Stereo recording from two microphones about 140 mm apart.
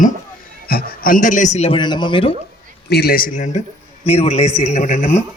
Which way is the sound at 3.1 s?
90° left.